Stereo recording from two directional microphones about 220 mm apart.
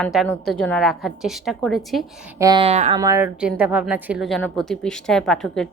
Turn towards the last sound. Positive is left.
turn(degrees=0)  # may be behind; listen again after turning